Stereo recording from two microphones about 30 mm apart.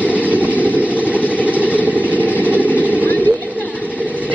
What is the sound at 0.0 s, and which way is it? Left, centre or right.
Vehicle, right.